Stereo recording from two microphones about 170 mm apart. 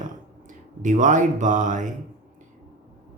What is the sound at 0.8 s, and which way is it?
Speech, 50° right (ahead or behind).